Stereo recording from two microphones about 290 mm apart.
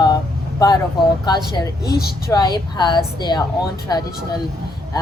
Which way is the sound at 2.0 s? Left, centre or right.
Left.